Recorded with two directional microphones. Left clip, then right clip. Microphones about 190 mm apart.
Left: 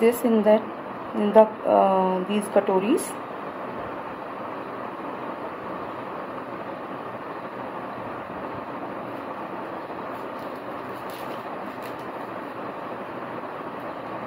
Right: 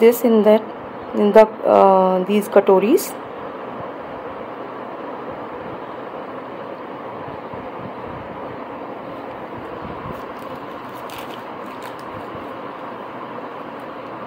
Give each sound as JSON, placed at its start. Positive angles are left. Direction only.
{"t": 0.0, "sound": "speech", "side_deg": -45}